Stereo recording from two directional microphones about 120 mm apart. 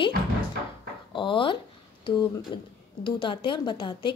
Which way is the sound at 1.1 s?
45° left (ahead or behind).